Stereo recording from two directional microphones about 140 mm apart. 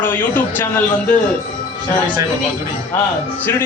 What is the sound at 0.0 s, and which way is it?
Speech, 15° left (ahead or behind).